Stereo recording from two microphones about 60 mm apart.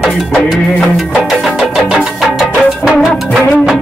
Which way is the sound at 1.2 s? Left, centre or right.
Centre.